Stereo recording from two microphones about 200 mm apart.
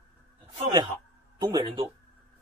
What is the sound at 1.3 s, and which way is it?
Speech, 20° right (ahead or behind).